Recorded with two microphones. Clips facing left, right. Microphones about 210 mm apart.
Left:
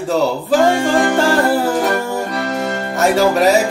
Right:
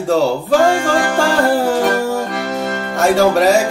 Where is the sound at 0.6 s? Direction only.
20° left (ahead or behind).